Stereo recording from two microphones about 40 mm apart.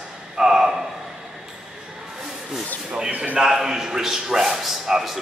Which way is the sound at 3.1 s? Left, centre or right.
Right.